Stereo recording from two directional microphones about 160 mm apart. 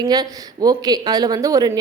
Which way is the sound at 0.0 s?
25° right (ahead or behind).